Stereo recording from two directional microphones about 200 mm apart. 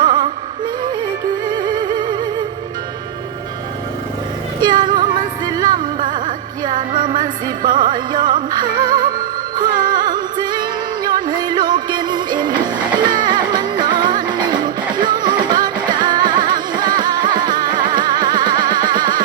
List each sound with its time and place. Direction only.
0.0 s music: 20° right (ahead or behind)
1.5 s music: 20° right (ahead or behind)
4.6 s music: 20° right (ahead or behind)
5.7 s music: 40° right (ahead or behind)
7.2 s music: 20° right (ahead or behind)
18.9 s a sound: 20° right (ahead or behind)